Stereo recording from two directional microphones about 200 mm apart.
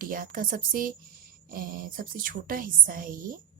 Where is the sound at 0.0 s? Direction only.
45° right (ahead or behind).